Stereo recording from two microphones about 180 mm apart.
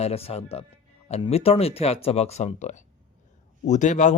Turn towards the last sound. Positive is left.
turn(degrees=40)  # may be behind; listen again after turning